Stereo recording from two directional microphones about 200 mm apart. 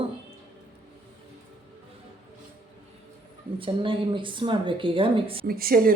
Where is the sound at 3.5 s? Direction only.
25° right (ahead or behind).